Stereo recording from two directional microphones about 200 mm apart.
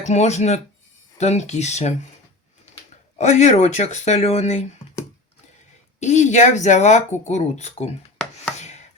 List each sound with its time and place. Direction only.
0.1 s speech: 35° left (ahead or behind)
3.2 s speech: 35° left (ahead or behind)
6.0 s speech: 35° left (ahead or behind)